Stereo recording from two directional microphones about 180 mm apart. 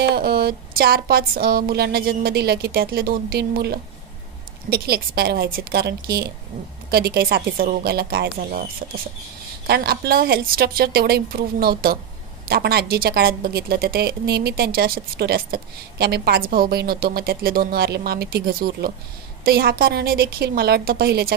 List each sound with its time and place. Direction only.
0.1 s speech: 60° right (ahead or behind)
9.7 s speech: 60° right (ahead or behind)